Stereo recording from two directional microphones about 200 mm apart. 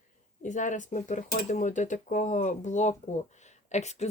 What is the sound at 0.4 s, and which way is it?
Speech, 40° left (ahead or behind).